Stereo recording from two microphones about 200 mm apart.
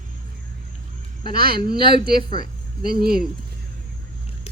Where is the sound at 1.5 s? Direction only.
25° left (ahead or behind).